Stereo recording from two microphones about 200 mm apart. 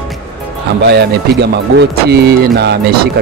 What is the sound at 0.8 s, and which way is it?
Speech, 55° right (ahead or behind).